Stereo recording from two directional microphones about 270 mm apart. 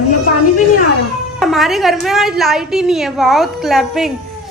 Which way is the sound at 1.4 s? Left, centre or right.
Centre.